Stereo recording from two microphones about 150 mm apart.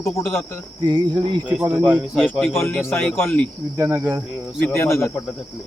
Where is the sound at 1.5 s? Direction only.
10° right (ahead or behind).